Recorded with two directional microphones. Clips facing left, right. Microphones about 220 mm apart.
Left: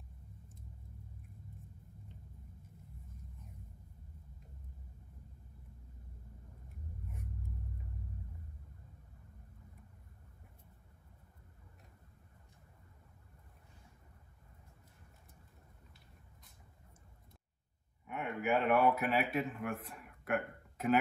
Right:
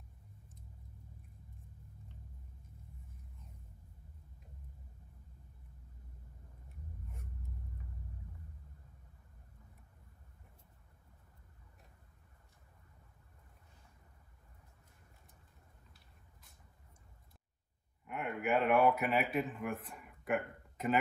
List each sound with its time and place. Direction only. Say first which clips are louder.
18.0 s speech: even; centre (ahead or behind)